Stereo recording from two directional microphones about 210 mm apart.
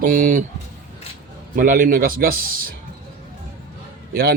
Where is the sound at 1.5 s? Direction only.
40° right (ahead or behind).